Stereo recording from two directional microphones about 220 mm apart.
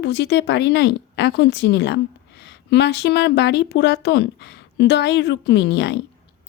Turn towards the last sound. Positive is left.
turn(degrees=50)  # may be behind; listen again after turning